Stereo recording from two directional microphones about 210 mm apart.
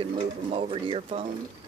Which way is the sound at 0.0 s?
25° right (ahead or behind).